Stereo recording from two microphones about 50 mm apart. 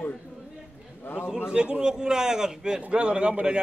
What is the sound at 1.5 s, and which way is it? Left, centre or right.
A man's voice, centre.